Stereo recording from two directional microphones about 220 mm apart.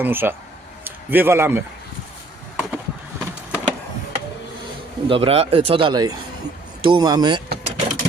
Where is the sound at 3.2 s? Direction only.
5° right (ahead or behind).